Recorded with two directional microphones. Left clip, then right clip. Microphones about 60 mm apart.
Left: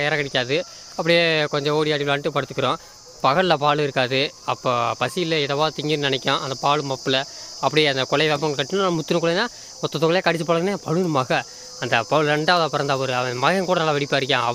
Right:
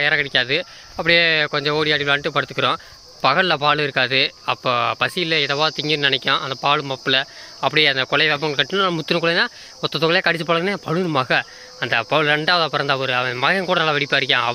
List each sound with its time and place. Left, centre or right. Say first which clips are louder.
0.0 s speech: right 4 dB; left
1.0 s speech: right 3 dB; left
1.5 s speech: right 2 dB; left
2.0 s speech: right 3 dB; left
3.2 s speech: right 1 dB; left
4.4 s speech: right 2 dB; centre
7.9 s speech: right 2 dB; left
8.5 s speech: right 3 dB; centre
11.1 s speech: right 2 dB; left
14.0 s speech: right 3 dB; left